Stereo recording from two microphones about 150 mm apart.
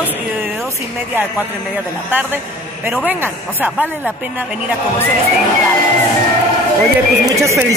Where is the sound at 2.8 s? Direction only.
10° right (ahead or behind).